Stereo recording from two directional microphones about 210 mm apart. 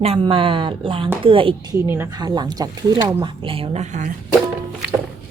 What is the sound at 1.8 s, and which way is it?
Speech, 10° right (ahead or behind).